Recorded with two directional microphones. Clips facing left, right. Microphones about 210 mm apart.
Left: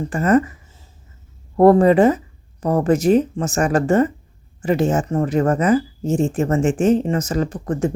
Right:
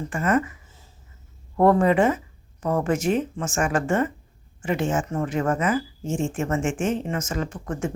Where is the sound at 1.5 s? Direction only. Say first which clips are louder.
Left 6 dB; 35° left (ahead or behind).